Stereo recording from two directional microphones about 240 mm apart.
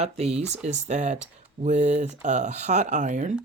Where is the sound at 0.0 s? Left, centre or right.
Right.